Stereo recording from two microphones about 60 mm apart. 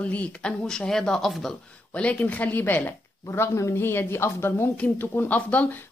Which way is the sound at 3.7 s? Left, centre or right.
Left.